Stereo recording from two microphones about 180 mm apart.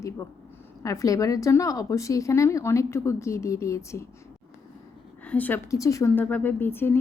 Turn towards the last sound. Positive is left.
turn(degrees=10)  # may be behind; listen again after turning